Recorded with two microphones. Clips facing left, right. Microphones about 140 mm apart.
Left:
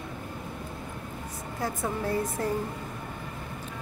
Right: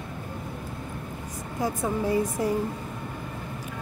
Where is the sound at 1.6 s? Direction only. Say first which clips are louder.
Right 4 dB; 15° right (ahead or behind).